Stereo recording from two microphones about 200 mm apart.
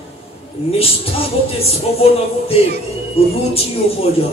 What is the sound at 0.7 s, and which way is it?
Speech, 30° left (ahead or behind).